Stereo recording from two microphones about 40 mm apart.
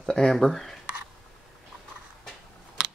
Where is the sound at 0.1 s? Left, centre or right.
Left.